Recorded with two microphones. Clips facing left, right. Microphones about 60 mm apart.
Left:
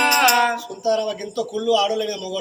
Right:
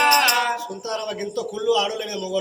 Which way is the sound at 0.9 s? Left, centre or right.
Right.